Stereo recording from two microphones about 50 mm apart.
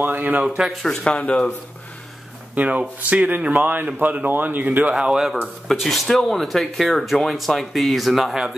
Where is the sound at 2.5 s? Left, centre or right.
Right.